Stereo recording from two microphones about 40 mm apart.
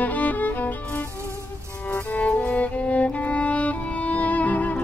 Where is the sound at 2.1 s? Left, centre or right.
Left.